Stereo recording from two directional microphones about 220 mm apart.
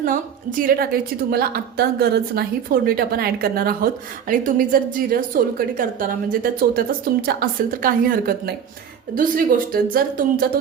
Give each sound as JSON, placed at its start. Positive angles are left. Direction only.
{"t": 0.0, "sound": "a woman's voice", "side_deg": -40}